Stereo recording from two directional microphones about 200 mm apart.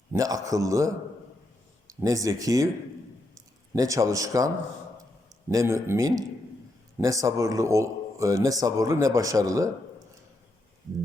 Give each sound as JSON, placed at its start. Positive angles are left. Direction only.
{"t": 0.1, "sound": "a man's voice", "side_deg": -15}
{"t": 1.9, "sound": "a man's voice", "side_deg": -15}